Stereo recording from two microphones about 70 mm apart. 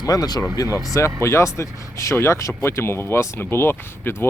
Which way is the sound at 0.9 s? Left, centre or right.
Left.